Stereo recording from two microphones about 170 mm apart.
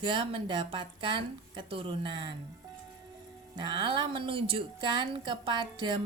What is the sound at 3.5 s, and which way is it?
A woman's voice, 25° right (ahead or behind).